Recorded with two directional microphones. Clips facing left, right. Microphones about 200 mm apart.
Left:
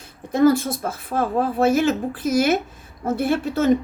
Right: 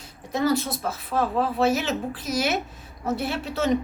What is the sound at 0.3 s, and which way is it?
Speech, 50° left (ahead or behind).